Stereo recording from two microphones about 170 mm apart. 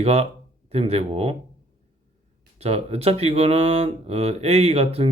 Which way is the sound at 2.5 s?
35° right (ahead or behind).